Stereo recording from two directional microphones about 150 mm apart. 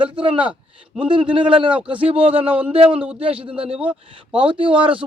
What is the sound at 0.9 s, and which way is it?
Speech, 35° right (ahead or behind).